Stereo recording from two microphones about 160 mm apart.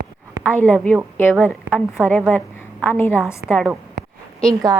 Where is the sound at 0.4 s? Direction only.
10° left (ahead or behind).